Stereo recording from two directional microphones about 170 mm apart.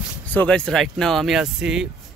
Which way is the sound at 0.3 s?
5° left (ahead or behind).